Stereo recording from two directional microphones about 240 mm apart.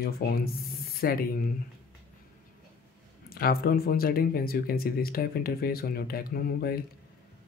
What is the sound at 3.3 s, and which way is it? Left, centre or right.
Speech, left.